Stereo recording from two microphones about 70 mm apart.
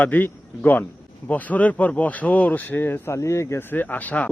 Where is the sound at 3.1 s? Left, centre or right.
Left.